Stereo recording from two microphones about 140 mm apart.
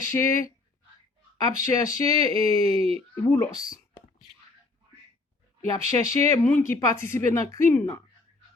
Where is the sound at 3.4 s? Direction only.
25° left (ahead or behind).